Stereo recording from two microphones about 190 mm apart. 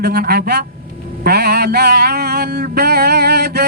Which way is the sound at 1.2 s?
55° right (ahead or behind).